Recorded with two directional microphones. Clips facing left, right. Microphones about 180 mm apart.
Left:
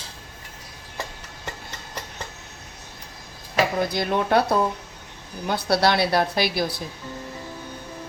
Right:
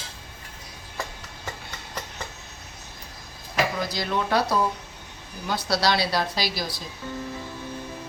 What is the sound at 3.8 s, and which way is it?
A woman's voice, 55° left (ahead or behind).